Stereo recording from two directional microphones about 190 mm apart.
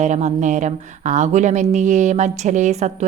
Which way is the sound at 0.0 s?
35° right (ahead or behind).